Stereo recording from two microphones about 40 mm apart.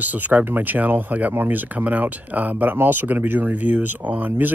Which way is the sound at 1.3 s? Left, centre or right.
Right.